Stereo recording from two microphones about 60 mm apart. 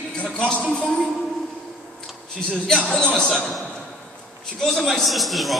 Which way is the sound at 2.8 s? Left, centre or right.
Centre.